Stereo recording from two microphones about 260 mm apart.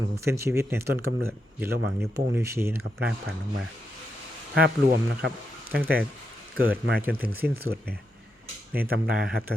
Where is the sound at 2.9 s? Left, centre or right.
Centre.